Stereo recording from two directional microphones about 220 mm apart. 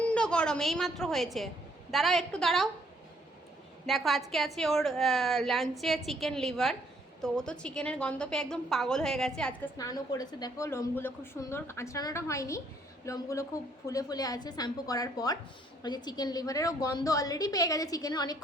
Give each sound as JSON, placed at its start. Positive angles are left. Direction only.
{"t": 0.1, "sound": "a woman's voice", "side_deg": 5}
{"t": 3.8, "sound": "a woman's voice", "side_deg": 0}
{"t": 9.7, "sound": "a woman's voice", "side_deg": 15}